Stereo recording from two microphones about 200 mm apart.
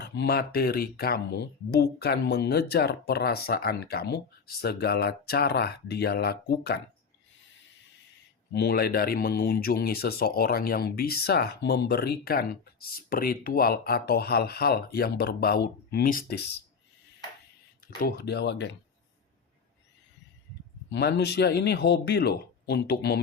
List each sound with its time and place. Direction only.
0.0 s speech: 55° left (ahead or behind)
8.5 s speech: 50° left (ahead or behind)
18.0 s speech: 55° left (ahead or behind)
20.9 s speech: 55° left (ahead or behind)